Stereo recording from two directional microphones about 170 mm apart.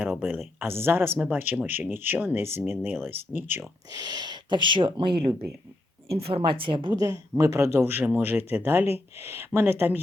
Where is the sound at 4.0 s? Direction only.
25° right (ahead or behind).